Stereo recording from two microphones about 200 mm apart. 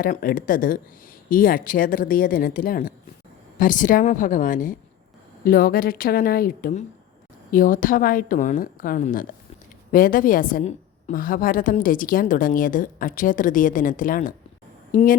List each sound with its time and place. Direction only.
0.0 s a woman's voice: 45° left (ahead or behind)